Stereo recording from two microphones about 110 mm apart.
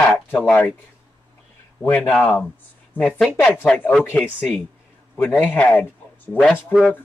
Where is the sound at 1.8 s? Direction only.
20° left (ahead or behind).